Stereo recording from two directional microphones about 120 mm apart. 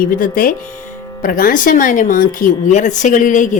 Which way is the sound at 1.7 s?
90° left.